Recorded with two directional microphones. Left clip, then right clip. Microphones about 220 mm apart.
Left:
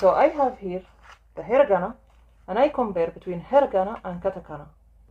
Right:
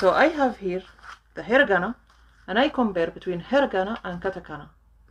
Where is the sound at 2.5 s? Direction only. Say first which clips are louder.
Left 1 dB; 40° right (ahead or behind).